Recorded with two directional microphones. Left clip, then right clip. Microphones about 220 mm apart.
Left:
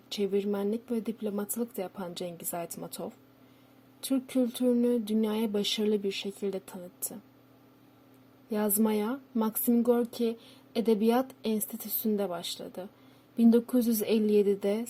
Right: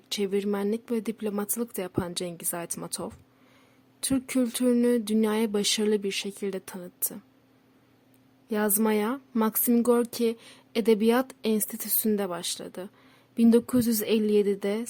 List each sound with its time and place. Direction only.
0.1 s speech: 25° right (ahead or behind)
8.4 s speech: 25° right (ahead or behind)